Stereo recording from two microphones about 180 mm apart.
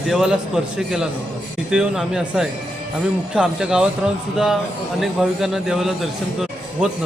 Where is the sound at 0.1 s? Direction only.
5° right (ahead or behind).